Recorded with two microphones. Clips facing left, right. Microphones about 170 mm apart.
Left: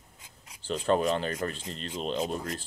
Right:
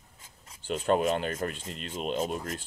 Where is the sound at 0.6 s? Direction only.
50° right (ahead or behind).